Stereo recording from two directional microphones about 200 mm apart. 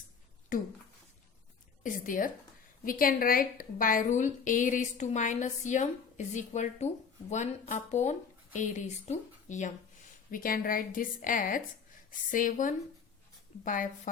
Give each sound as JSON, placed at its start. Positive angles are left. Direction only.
{"t": 0.5, "sound": "a woman's voice", "side_deg": 40}
{"t": 1.8, "sound": "a woman's voice", "side_deg": 40}